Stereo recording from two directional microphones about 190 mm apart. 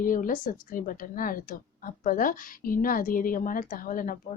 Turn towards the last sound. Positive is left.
turn(degrees=45)  # may be behind; listen again after turning